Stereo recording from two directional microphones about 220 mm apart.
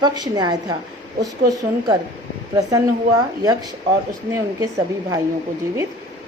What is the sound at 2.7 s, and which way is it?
A woman's voice, 15° right (ahead or behind).